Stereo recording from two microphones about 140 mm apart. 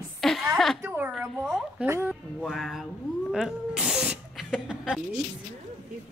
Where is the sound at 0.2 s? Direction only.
Centre (ahead or behind).